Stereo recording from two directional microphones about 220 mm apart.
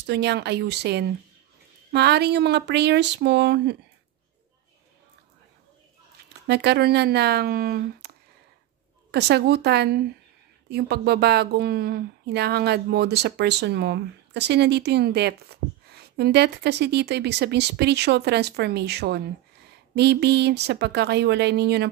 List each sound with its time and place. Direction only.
0.0 s a woman's voice: 50° right (ahead or behind)
6.4 s a woman's voice: 50° right (ahead or behind)
9.1 s a woman's voice: 50° right (ahead or behind)